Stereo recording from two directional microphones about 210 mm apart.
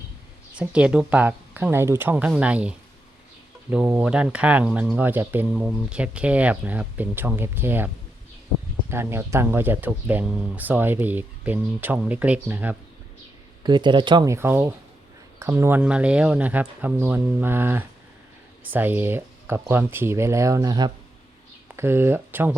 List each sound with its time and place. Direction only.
0.5 s speech: 5° right (ahead or behind)
8.9 s speech: 10° right (ahead or behind)
13.6 s speech: 20° right (ahead or behind)